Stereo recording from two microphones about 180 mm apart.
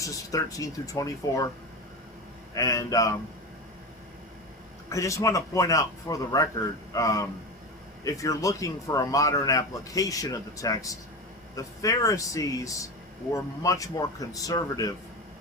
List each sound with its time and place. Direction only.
0.0 s speech: 20° left (ahead or behind)
2.6 s speech: 20° left (ahead or behind)
4.9 s a man's voice: 15° left (ahead or behind)